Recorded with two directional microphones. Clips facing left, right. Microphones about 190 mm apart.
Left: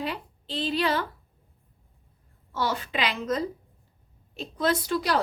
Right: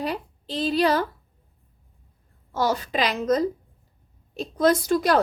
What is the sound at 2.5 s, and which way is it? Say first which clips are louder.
A woman's voice: right 5 dB; 45° right (ahead or behind).